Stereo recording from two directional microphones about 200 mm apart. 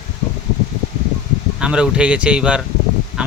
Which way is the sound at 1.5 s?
5° right (ahead or behind).